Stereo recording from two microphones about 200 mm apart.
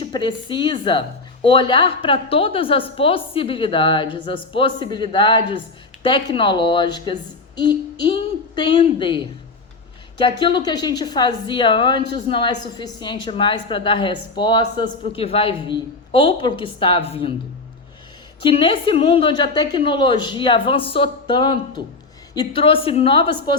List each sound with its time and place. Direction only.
0.0 s a woman's voice: 25° left (ahead or behind)
18.4 s a woman's voice: 25° left (ahead or behind)